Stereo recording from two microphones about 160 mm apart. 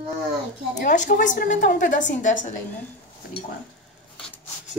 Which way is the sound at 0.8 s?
50° left (ahead or behind).